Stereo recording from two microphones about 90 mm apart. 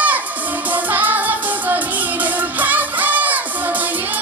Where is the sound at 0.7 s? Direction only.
20° right (ahead or behind).